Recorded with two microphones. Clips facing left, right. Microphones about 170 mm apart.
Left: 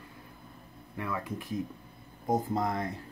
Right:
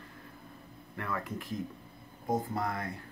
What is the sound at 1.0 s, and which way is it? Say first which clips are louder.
Speech: left 1 dB; 10° left (ahead or behind).